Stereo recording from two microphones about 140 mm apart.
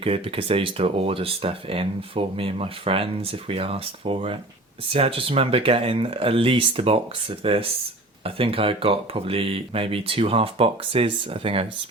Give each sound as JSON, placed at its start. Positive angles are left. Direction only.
{"t": 0.0, "sound": "speech", "side_deg": -40}